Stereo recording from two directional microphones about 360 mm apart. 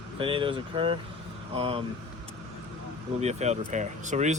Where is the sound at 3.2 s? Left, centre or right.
Centre.